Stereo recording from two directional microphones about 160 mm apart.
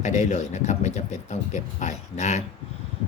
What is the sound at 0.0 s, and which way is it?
Speech, 50° left (ahead or behind).